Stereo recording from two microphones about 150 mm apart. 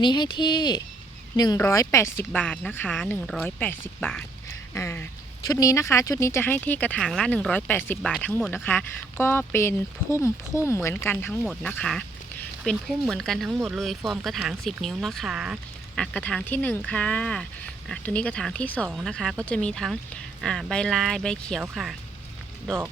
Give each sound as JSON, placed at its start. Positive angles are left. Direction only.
{"t": 0.0, "sound": "speech", "side_deg": 30}
{"t": 16.0, "sound": "speech", "side_deg": 5}